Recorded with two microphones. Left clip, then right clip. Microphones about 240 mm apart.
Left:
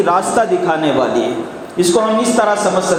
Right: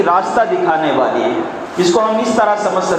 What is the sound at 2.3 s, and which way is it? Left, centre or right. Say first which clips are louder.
Speech: right 1 dB; left.